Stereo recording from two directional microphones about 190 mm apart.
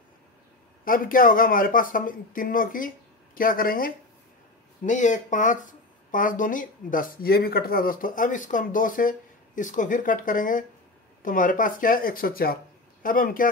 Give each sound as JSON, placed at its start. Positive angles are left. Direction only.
{"t": 0.8, "sound": "speech", "side_deg": 45}